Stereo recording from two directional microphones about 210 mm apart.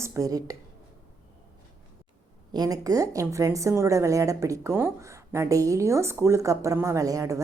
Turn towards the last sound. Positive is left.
turn(degrees=-15)  # may be behind; listen again after turning